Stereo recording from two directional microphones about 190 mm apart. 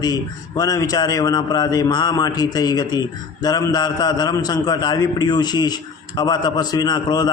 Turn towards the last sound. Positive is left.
turn(degrees=20)  # may be behind; listen again after turning